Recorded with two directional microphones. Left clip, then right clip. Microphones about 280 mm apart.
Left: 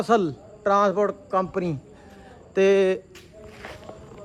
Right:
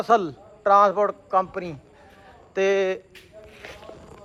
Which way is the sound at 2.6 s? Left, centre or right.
Centre.